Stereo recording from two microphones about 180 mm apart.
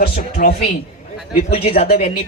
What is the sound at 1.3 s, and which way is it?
Speech, 35° left (ahead or behind).